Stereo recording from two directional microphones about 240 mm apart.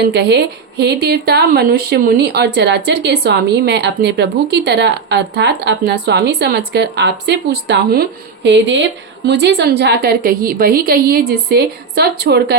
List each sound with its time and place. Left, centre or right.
0.0 s a woman's voice: right